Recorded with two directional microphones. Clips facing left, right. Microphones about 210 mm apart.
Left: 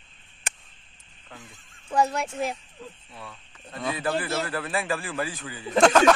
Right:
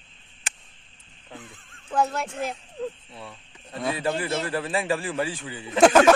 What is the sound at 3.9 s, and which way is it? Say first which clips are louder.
A man's voice: right 1 dB; 25° right (ahead or behind).